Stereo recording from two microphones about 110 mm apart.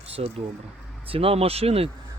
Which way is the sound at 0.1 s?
65° right (ahead or behind).